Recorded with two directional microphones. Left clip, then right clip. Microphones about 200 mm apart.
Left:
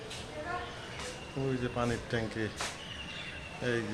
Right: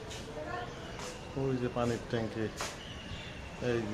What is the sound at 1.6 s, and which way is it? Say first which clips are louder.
Speech: even; centre (ahead or behind).